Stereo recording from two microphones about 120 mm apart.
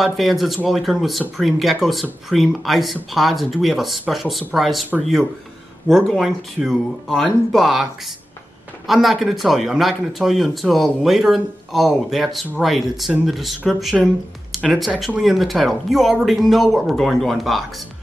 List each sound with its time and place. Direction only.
0.0 s speech: centre (ahead or behind)
5.9 s speech: centre (ahead or behind)